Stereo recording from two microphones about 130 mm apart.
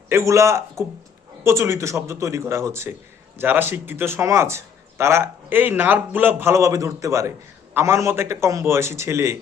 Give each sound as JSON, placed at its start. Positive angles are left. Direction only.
{"t": 0.1, "sound": "speech", "side_deg": -20}